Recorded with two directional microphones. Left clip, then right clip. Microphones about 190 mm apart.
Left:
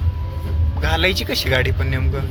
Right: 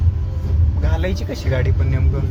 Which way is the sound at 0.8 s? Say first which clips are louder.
Left 8 dB; centre (ahead or behind).